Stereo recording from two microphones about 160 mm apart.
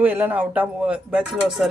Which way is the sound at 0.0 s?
10° right (ahead or behind).